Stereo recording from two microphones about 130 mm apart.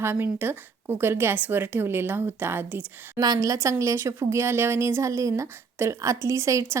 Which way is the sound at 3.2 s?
30° right (ahead or behind).